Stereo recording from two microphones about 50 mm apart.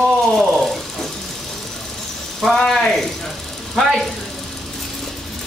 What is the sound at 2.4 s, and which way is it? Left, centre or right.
Speech, centre.